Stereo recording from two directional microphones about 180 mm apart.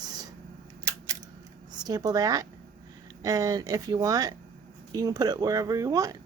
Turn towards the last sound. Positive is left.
turn(degrees=-20)  # may be behind; listen again after turning